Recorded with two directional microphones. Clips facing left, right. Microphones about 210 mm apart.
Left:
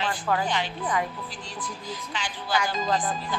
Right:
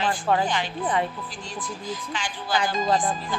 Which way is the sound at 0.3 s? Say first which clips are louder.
Right 3 dB; 25° right (ahead or behind).